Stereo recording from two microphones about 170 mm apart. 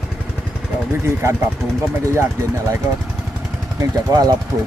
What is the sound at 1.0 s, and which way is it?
Speech, 15° right (ahead or behind).